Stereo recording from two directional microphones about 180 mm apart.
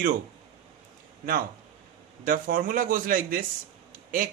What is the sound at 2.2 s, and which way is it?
A man's voice, 50° right (ahead or behind).